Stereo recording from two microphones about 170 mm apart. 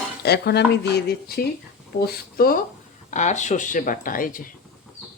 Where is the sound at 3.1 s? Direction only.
45° left (ahead or behind).